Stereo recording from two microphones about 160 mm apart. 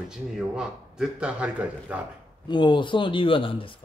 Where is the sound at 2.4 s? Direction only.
30° left (ahead or behind).